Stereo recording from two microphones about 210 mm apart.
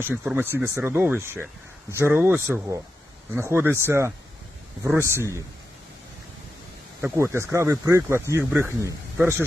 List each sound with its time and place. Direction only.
0.0 s speech: 10° right (ahead or behind)
7.0 s speech: 15° right (ahead or behind)